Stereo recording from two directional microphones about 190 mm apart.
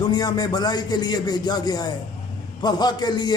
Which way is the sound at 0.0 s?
20° left (ahead or behind).